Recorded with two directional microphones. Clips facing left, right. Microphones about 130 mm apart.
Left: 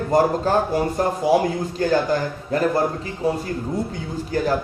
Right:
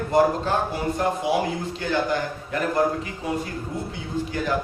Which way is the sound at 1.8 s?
40° left (ahead or behind).